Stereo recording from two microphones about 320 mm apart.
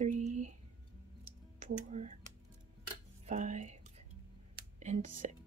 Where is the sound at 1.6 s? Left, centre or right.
Right.